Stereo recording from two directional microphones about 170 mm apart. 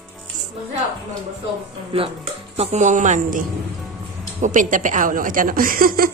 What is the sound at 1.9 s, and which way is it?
Speech, 35° right (ahead or behind).